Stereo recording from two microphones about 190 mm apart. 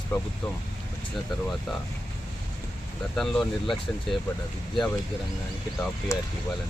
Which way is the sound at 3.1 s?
5° left (ahead or behind).